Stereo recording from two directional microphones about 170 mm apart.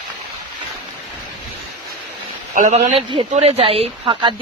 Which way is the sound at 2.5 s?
45° right (ahead or behind).